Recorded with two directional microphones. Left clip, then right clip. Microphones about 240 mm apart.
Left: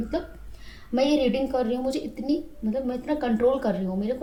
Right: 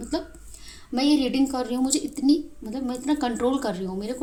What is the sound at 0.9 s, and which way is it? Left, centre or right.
A woman's voice, right.